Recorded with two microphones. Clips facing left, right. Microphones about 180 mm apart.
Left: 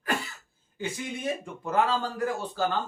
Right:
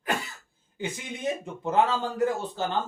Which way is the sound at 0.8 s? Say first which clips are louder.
Even; 20° right (ahead or behind).